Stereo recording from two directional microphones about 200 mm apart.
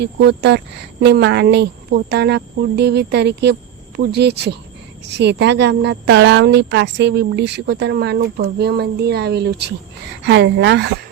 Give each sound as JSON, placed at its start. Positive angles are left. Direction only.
{"t": 0.0, "sound": "a woman's voice", "side_deg": -55}